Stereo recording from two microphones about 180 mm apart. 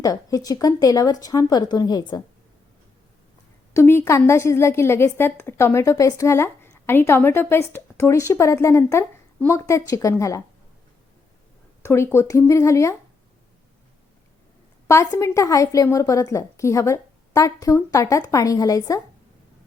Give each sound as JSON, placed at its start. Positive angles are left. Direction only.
{"t": 0.0, "sound": "speech", "side_deg": 20}
{"t": 3.8, "sound": "a woman's voice", "side_deg": 15}
{"t": 11.8, "sound": "a woman's voice", "side_deg": 15}
{"t": 14.8, "sound": "a woman's voice", "side_deg": 15}